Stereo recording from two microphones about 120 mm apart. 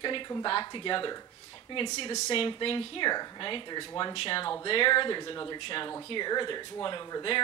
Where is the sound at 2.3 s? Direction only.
50° left (ahead or behind).